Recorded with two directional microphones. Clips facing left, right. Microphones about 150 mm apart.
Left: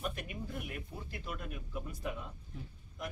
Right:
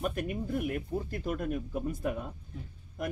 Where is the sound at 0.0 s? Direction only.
50° right (ahead or behind).